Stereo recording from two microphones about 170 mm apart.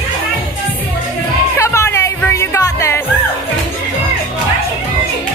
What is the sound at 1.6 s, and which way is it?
Music, 15° left (ahead or behind).